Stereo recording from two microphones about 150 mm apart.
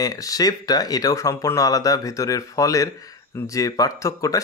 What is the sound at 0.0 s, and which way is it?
Speech, 25° left (ahead or behind).